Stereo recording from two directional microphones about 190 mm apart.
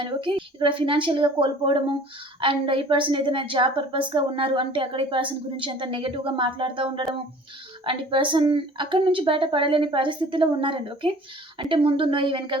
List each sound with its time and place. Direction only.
0.0 s a woman's voice: 25° right (ahead or behind)